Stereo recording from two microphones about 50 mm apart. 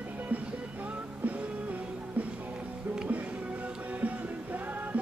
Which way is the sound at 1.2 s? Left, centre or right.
Right.